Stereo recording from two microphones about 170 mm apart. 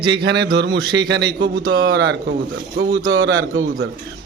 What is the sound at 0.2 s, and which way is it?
Speech, 90° right.